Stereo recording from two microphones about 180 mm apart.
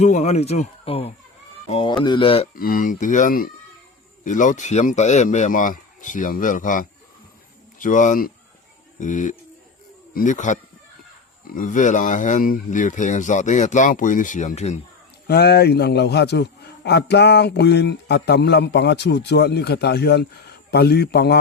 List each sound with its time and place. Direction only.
0.0 s speech: 40° left (ahead or behind)
2.6 s speech: 50° left (ahead or behind)
15.3 s a man's voice: 65° left (ahead or behind)